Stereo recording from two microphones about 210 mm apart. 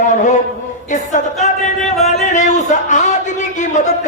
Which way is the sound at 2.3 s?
35° left (ahead or behind).